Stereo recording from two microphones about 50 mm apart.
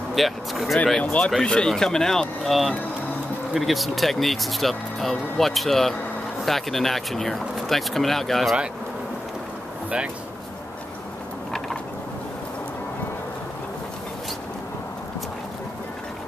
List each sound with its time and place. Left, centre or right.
0.1 s speech: centre